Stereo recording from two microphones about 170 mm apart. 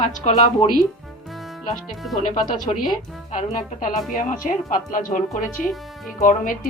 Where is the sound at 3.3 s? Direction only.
50° left (ahead or behind).